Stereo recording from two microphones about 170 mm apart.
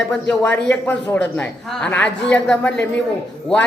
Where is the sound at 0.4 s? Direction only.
10° left (ahead or behind).